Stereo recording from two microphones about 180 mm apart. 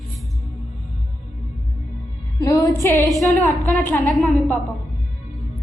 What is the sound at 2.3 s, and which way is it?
Music, 20° left (ahead or behind).